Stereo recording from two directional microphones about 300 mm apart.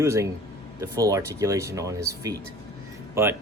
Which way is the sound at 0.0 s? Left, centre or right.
Centre.